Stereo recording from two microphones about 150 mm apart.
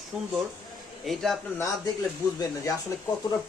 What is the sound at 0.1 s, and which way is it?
Speech, 5° right (ahead or behind).